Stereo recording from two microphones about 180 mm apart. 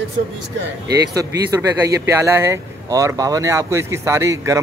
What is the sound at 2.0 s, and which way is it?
Speech, 15° right (ahead or behind).